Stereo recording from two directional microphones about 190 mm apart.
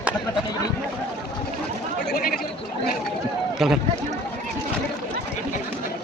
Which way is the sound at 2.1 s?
50° left (ahead or behind).